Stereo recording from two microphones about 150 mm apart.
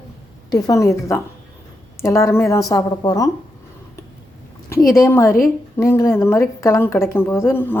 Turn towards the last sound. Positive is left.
turn(degrees=15)  # may be behind; listen again after turning